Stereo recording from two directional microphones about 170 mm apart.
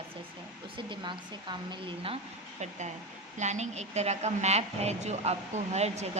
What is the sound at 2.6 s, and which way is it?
A woman's voice, 45° right (ahead or behind).